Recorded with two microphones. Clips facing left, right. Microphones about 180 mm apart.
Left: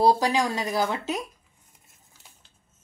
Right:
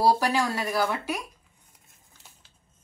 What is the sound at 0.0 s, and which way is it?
Speech, 15° left (ahead or behind).